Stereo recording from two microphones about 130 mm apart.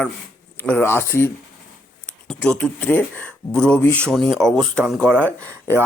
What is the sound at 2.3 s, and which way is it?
Speech, 5° left (ahead or behind).